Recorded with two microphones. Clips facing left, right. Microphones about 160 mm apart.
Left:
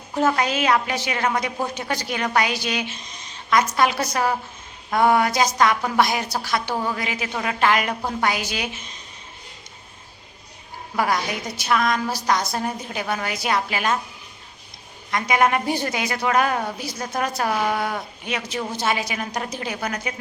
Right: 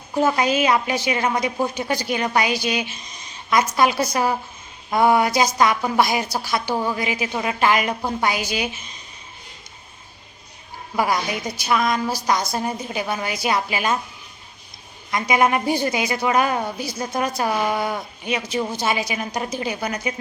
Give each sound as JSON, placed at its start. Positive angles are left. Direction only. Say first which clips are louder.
{"t": 0.1, "sound": "a woman's voice", "louder": "right 2 dB", "side_deg": -5}
{"t": 10.9, "sound": "a woman's voice", "louder": "right 1 dB", "side_deg": -5}
{"t": 15.1, "sound": "a woman's voice", "louder": "right 1 dB", "side_deg": -5}